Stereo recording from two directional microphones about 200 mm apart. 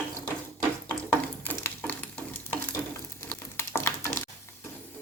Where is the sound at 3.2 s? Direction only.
15° left (ahead or behind).